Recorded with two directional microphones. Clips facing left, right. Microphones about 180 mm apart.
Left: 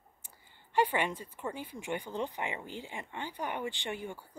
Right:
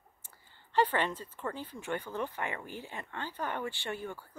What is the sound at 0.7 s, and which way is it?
Speech, 10° left (ahead or behind).